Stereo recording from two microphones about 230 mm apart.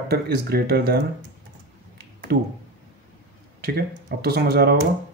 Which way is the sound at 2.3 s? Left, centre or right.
Right.